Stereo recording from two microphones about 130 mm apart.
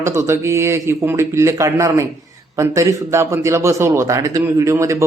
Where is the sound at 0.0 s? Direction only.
20° right (ahead or behind).